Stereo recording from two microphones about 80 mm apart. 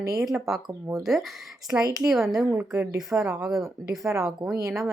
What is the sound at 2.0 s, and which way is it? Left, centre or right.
Speech, centre.